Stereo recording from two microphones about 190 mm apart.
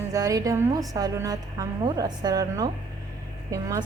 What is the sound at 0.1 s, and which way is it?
A woman's voice, 20° right (ahead or behind).